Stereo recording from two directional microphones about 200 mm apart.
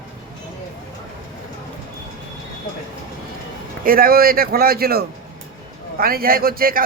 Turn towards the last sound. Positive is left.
turn(degrees=-45)  # may be behind; listen again after turning